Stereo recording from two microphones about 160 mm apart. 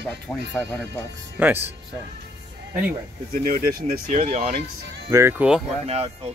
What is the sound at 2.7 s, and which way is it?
Speech, 10° right (ahead or behind).